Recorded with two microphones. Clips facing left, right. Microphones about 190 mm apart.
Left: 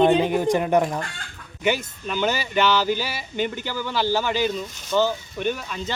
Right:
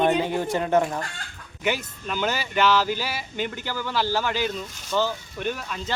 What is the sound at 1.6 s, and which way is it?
Speech, centre (ahead or behind).